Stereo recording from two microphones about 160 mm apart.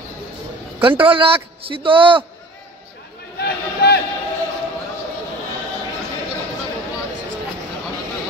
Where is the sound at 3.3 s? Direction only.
85° left.